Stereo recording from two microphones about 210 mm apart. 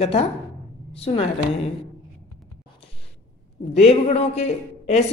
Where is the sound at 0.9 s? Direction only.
30° left (ahead or behind).